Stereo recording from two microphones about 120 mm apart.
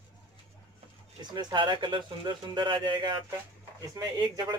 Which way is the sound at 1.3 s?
40° right (ahead or behind).